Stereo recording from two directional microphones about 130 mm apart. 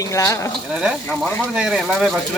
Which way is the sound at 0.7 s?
5° right (ahead or behind).